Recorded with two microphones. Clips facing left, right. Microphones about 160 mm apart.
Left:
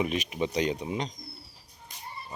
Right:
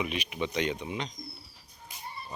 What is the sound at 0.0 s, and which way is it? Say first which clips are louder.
Speech: left 4 dB; 40° left (ahead or behind).